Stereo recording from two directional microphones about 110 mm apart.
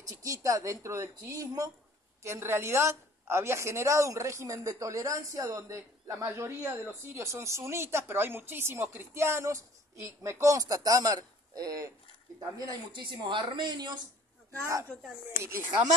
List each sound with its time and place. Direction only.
0.0 s a woman's voice: 30° right (ahead or behind)
15.4 s a woman's voice: 20° right (ahead or behind)